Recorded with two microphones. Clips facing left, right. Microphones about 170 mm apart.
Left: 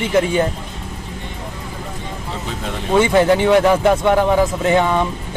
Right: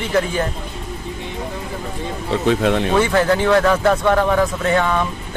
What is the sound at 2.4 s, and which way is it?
Speech, 75° right (ahead or behind).